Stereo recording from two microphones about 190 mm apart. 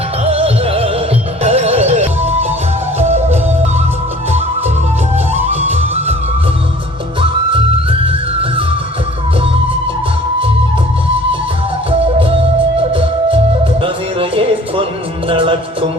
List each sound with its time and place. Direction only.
0.3 s music: 30° right (ahead or behind)
5.3 s music: 35° right (ahead or behind)
7.2 s music: 25° right (ahead or behind)
12.9 s music: 30° right (ahead or behind)